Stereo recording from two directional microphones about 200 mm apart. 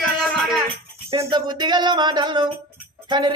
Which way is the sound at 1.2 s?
20° right (ahead or behind).